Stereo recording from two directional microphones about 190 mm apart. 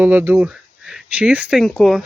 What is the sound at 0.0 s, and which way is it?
Speech, 10° right (ahead or behind).